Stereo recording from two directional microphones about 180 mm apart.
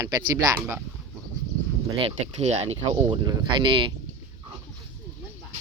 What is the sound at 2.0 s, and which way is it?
Speech, 35° right (ahead or behind).